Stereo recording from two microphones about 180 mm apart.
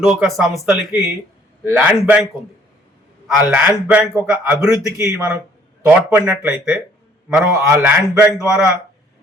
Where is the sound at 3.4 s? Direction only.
10° right (ahead or behind).